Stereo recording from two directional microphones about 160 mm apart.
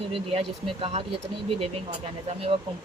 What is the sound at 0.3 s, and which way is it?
Speech, 40° right (ahead or behind).